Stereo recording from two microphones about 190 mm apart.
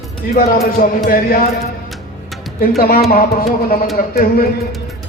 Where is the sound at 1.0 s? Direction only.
50° left (ahead or behind).